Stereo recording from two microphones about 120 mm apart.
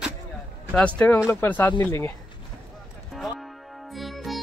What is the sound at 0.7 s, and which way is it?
Speech, 10° left (ahead or behind).